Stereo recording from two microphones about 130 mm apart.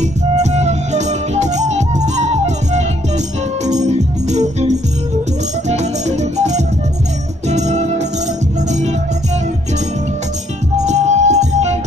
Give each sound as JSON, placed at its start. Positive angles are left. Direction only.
{"t": 0.0, "sound": "music", "side_deg": -60}
{"t": 10.9, "sound": "music", "side_deg": -60}